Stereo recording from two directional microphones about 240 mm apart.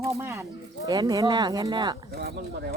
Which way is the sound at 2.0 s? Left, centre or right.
Right.